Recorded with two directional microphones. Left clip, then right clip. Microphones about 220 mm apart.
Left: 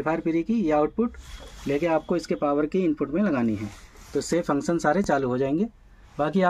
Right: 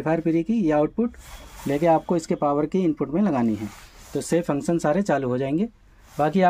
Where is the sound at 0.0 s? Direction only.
25° right (ahead or behind).